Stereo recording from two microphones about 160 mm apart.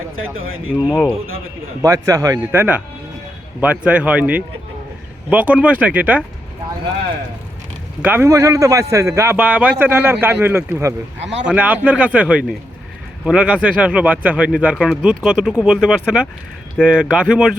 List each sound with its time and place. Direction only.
0.9 s speech: 5° left (ahead or behind)
1.8 s a man's voice: 20° right (ahead or behind)
8.0 s a man's voice: 15° right (ahead or behind)